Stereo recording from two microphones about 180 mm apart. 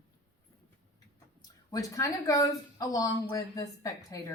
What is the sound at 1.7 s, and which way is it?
Speech, 20° left (ahead or behind).